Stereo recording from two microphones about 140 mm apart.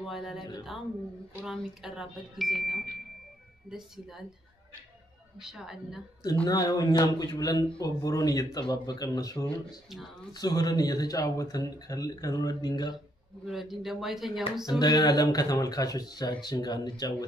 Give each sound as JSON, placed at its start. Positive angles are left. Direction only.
{"t": 0.0, "sound": "speech", "side_deg": 0}
{"t": 1.4, "sound": "speech", "side_deg": -5}
{"t": 5.4, "sound": "speech", "side_deg": -5}
{"t": 6.4, "sound": "speech", "side_deg": 30}
{"t": 13.5, "sound": "speech", "side_deg": 0}
{"t": 14.7, "sound": "speech", "side_deg": 30}